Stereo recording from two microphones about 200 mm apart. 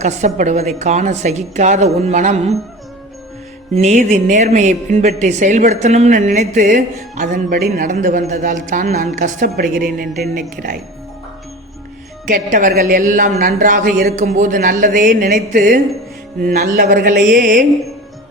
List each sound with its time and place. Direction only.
0.0 s a woman's voice: 35° right (ahead or behind)
3.8 s a woman's voice: 35° right (ahead or behind)
12.2 s a woman's voice: 40° right (ahead or behind)